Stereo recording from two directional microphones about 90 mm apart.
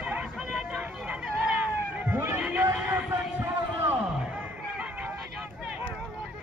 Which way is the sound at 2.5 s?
25° right (ahead or behind).